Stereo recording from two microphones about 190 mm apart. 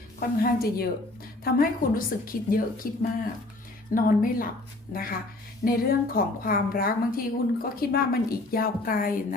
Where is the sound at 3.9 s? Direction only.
45° left (ahead or behind).